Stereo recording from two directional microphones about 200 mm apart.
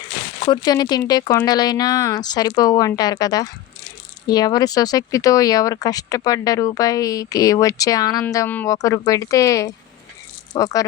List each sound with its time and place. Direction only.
0.4 s speech: 20° left (ahead or behind)